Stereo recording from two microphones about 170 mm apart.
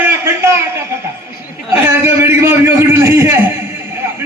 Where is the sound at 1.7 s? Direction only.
15° right (ahead or behind).